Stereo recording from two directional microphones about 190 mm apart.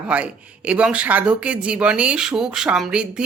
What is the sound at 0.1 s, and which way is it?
A woman's voice, 5° right (ahead or behind).